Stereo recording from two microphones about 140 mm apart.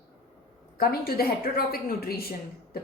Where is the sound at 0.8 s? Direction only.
90° left.